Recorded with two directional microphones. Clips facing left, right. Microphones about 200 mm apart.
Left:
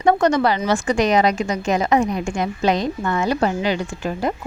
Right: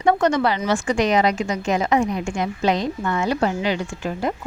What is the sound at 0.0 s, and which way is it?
Speech, 40° left (ahead or behind).